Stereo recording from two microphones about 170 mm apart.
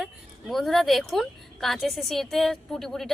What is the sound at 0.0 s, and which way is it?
A woman's voice, centre (ahead or behind).